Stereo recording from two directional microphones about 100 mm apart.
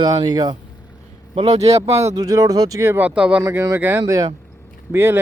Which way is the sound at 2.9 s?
15° right (ahead or behind).